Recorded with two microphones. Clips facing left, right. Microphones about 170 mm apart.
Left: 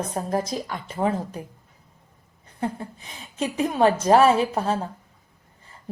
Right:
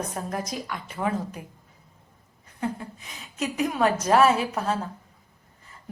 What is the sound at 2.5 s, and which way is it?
A woman's voice, 30° left (ahead or behind).